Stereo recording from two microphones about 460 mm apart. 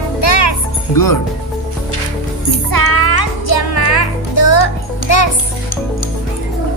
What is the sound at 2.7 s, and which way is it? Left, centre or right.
Music, left.